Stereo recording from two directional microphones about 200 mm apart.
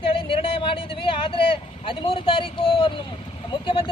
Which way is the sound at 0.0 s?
25° left (ahead or behind).